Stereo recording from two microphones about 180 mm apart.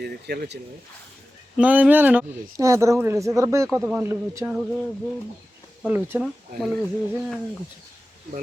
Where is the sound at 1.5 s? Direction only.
10° right (ahead or behind).